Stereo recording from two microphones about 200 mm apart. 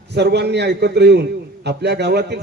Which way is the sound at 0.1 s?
55° right (ahead or behind).